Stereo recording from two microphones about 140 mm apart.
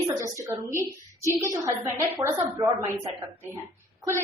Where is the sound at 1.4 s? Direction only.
20° right (ahead or behind).